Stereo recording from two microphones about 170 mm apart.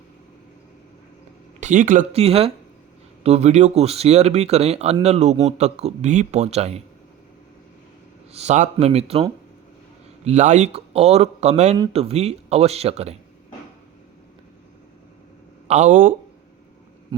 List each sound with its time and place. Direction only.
1.6 s a man's voice: 50° right (ahead or behind)
8.3 s a man's voice: 40° right (ahead or behind)
15.6 s speech: 45° right (ahead or behind)